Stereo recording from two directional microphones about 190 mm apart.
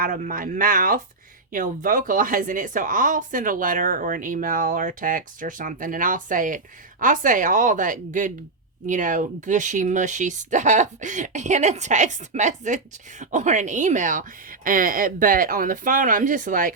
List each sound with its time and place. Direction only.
0.0 s speech: 50° right (ahead or behind)